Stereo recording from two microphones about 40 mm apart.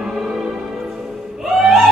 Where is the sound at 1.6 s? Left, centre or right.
Centre.